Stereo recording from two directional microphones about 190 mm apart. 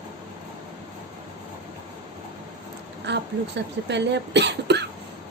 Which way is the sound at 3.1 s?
65° right (ahead or behind).